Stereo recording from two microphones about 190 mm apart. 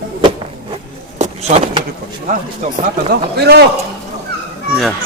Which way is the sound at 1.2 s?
35° right (ahead or behind).